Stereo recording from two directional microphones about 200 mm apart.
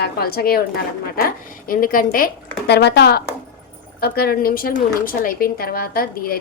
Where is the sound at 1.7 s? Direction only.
45° left (ahead or behind).